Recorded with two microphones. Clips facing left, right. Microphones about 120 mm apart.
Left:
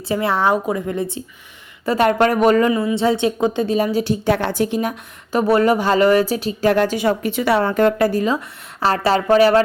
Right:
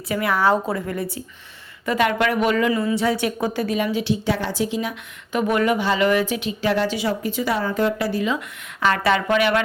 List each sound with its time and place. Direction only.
0.1 s a woman's voice: 30° left (ahead or behind)
1.8 s speech: 35° left (ahead or behind)
2.7 s a woman's voice: 25° left (ahead or behind)
3.8 s a woman's voice: 40° left (ahead or behind)